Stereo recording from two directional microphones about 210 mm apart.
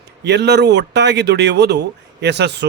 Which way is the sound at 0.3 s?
55° right (ahead or behind).